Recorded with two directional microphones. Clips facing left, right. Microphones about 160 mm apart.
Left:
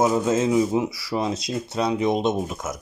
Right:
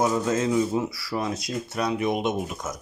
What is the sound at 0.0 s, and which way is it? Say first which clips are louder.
Speech: left 3 dB; 20° left (ahead or behind).